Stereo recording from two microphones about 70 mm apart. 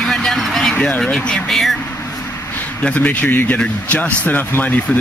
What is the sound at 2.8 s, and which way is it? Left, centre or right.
A man's voice, left.